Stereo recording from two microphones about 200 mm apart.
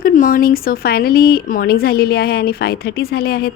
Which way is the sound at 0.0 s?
45° left (ahead or behind).